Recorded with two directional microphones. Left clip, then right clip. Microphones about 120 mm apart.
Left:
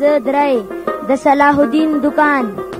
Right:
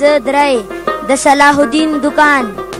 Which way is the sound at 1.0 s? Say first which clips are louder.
Right 3 dB; 35° right (ahead or behind).